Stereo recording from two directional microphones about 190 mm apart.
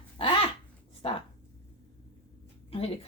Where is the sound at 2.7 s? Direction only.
30° left (ahead or behind).